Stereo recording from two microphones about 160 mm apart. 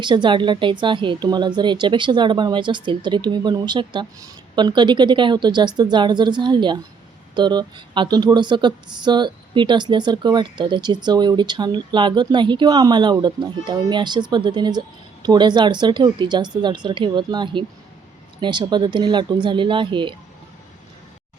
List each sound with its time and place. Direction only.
0.0 s speech: 30° right (ahead or behind)